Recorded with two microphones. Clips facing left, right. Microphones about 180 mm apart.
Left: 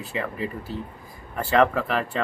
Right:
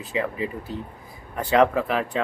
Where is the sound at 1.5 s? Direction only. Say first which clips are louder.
Right 1 dB; 5° right (ahead or behind).